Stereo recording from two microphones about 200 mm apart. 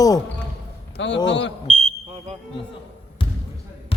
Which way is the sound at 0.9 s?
65° left (ahead or behind).